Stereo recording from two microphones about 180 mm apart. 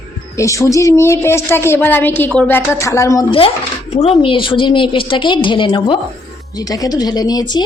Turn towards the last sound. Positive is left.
turn(degrees=25)  # may be behind; listen again after turning